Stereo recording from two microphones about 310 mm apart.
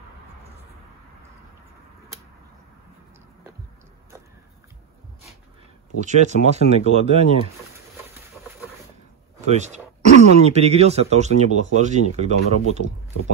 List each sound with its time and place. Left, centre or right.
5.9 s speech: right
9.5 s speech: right